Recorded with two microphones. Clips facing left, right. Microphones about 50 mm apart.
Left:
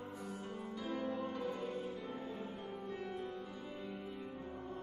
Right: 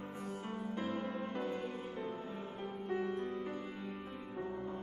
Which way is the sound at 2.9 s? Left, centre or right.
Right.